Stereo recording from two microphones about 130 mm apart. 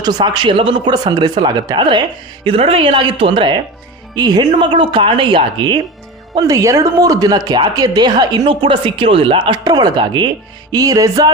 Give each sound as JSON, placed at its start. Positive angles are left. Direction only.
{"t": 0.0, "sound": "speech", "side_deg": -30}
{"t": 2.4, "sound": "speech", "side_deg": -45}
{"t": 6.3, "sound": "speech", "side_deg": -25}
{"t": 9.6, "sound": "speech", "side_deg": -30}
{"t": 10.7, "sound": "music", "side_deg": -30}